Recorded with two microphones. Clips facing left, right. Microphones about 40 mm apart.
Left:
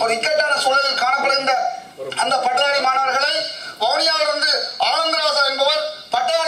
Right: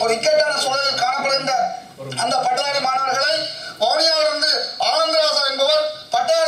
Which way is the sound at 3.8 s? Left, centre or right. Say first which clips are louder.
Right 1 dB; left.